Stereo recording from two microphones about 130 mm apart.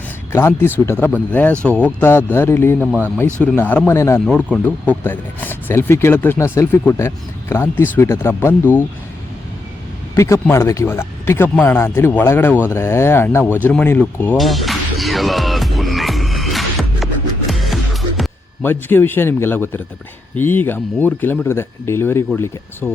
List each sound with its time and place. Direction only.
0.3 s speech: 20° left (ahead or behind)
2.8 s speech: 10° right (ahead or behind)
3.4 s speech: 10° left (ahead or behind)
10.2 s speech: 25° left (ahead or behind)
14.3 s music: centre (ahead or behind)
18.6 s speech: 15° left (ahead or behind)